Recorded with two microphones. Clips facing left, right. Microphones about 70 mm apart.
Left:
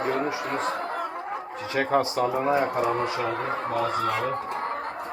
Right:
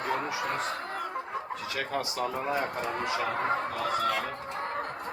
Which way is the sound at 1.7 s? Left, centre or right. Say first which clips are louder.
Left 10 dB; left.